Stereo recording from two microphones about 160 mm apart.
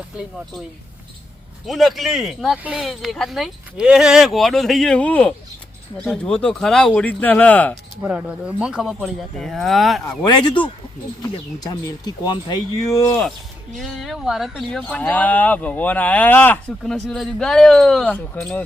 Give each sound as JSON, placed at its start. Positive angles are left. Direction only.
{"t": 1.6, "sound": "speech", "side_deg": 0}
{"t": 8.0, "sound": "speech", "side_deg": -5}
{"t": 10.4, "sound": "speech", "side_deg": 30}
{"t": 13.7, "sound": "speech", "side_deg": 0}